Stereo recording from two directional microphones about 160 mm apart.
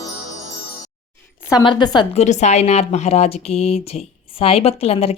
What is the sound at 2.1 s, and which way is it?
Speech, 45° left (ahead or behind).